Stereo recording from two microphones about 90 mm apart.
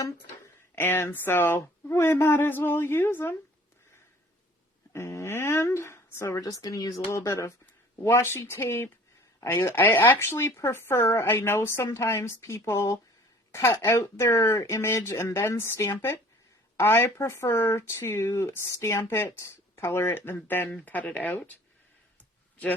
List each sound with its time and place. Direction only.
0.8 s speech: 25° left (ahead or behind)
4.9 s speech: 30° left (ahead or behind)